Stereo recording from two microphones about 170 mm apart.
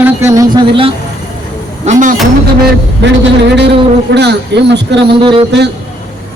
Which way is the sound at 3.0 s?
90° right.